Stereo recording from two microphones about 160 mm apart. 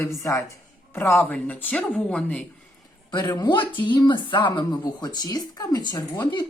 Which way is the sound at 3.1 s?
25° left (ahead or behind).